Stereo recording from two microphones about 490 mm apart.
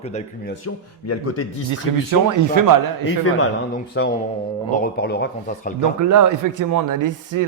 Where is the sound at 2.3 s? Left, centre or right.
Right.